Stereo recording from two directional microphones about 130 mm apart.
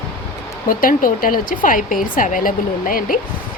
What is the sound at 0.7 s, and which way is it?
A woman's voice, 90° left.